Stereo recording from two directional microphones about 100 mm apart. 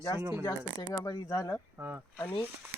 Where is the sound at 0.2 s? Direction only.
15° right (ahead or behind).